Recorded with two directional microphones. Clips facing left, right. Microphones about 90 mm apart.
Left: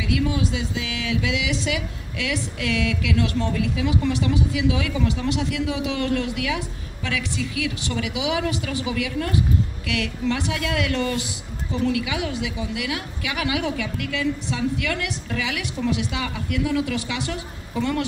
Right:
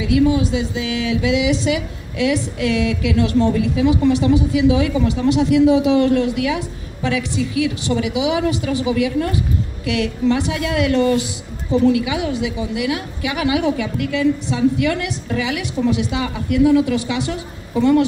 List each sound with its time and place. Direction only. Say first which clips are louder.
0.0 s speech: right 8 dB; 25° right (ahead or behind)